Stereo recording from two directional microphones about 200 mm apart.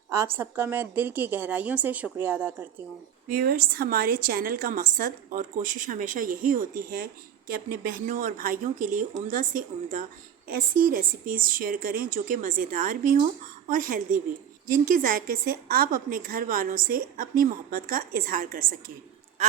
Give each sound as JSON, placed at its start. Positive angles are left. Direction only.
{"t": 0.1, "sound": "a woman's voice", "side_deg": -10}
{"t": 3.2, "sound": "a woman's voice", "side_deg": -45}
{"t": 15.7, "sound": "a woman's voice", "side_deg": -45}